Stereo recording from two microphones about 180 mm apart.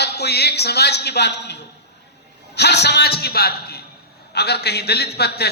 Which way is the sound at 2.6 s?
70° left (ahead or behind).